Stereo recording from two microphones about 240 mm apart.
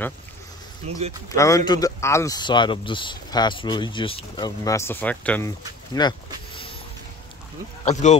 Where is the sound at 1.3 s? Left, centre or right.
Centre.